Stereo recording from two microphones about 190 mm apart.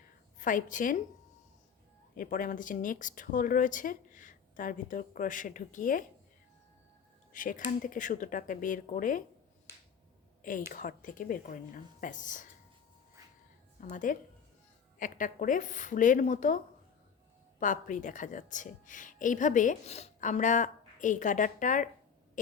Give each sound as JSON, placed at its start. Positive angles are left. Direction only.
{"t": 0.3, "sound": "speech", "side_deg": 45}
{"t": 2.1, "sound": "speech", "side_deg": 45}
{"t": 7.3, "sound": "speech", "side_deg": 45}
{"t": 10.7, "sound": "speech", "side_deg": 45}
{"t": 13.9, "sound": "speech", "side_deg": 45}
{"t": 17.6, "sound": "a woman's voice", "side_deg": 45}